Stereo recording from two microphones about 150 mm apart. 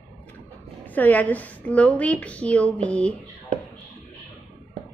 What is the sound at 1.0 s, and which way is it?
A woman's voice, 10° left (ahead or behind).